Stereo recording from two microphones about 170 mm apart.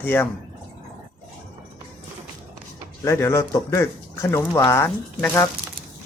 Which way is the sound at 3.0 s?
15° left (ahead or behind).